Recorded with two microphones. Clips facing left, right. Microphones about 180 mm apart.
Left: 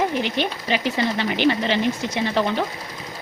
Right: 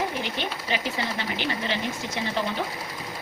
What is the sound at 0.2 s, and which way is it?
Speech, 80° left.